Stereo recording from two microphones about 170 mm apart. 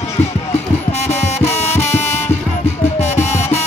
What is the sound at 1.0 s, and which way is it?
Music, 40° left (ahead or behind).